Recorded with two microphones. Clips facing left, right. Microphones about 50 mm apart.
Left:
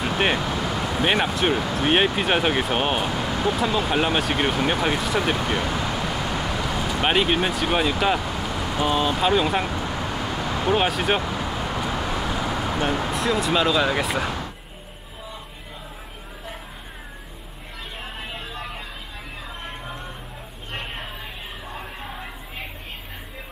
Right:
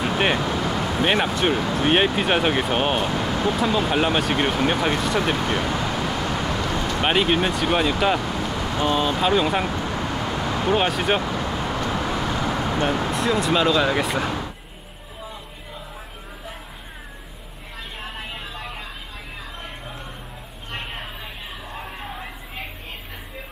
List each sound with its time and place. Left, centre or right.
0.0 s speech: centre
18.0 s vehicle: centre
20.7 s a sound: centre